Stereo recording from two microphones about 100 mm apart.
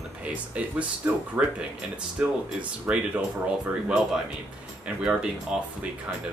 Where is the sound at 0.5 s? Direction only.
15° right (ahead or behind).